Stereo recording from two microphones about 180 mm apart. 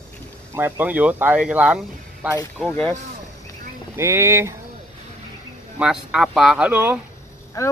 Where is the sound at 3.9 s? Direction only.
15° right (ahead or behind).